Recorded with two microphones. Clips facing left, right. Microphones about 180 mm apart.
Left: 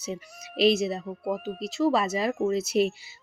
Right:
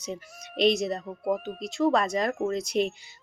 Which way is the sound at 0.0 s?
5° left (ahead or behind).